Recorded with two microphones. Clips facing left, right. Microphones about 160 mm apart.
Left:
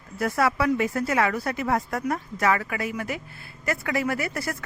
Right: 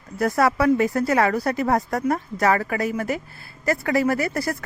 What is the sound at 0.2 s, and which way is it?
Speech, 40° right (ahead or behind).